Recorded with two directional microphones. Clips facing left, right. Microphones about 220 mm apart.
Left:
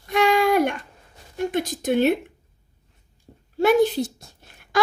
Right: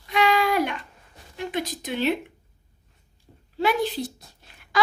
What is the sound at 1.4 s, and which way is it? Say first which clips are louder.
Speech: left 5 dB; 45° left (ahead or behind).